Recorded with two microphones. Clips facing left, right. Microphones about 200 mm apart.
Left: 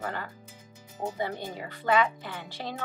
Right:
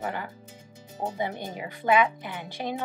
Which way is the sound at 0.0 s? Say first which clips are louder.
Right 2 dB; 15° right (ahead or behind).